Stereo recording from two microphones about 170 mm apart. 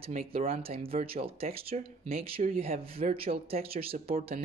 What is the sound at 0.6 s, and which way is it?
Speech, 35° right (ahead or behind).